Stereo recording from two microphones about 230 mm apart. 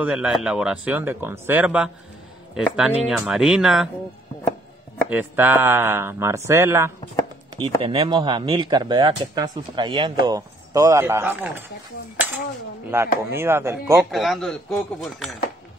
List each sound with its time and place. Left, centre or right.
0.0 s speech: centre
5.1 s speech: centre
7.5 s speech: right
12.9 s speech: centre
14.1 s speech: centre